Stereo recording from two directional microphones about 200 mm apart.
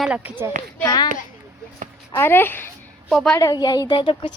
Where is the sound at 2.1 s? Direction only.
10° left (ahead or behind).